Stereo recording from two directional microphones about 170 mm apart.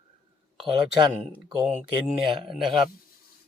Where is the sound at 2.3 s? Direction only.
30° right (ahead or behind).